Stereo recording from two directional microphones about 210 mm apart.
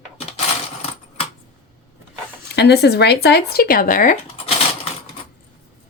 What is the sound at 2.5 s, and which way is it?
Speech, 50° left (ahead or behind).